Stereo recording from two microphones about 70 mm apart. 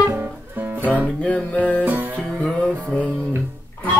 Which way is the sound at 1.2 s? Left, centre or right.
Left.